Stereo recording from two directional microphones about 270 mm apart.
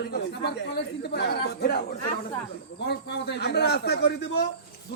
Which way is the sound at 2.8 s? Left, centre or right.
Left.